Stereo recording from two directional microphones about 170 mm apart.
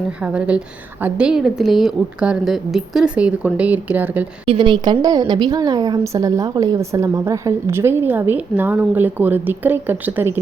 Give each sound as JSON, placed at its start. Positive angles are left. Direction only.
{"t": 0.3, "sound": "a woman's voice", "side_deg": -5}
{"t": 4.4, "sound": "a woman's voice", "side_deg": -30}